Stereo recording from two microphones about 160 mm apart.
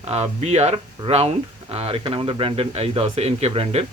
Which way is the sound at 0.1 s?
40° right (ahead or behind).